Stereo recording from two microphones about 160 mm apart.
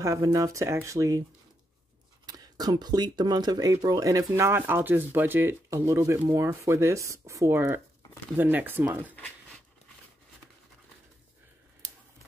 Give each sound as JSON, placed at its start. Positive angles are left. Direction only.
{"t": 0.0, "sound": "speech", "side_deg": -20}
{"t": 2.2, "sound": "speech", "side_deg": -25}